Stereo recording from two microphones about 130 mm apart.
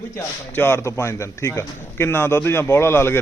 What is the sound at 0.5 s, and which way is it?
A man's voice, 20° left (ahead or behind).